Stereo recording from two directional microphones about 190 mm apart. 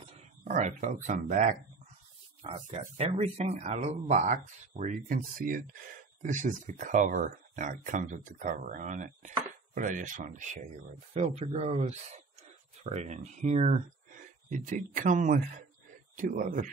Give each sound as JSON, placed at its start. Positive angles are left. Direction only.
{"t": 0.0, "sound": "speech", "side_deg": -35}
{"t": 2.7, "sound": "speech", "side_deg": -30}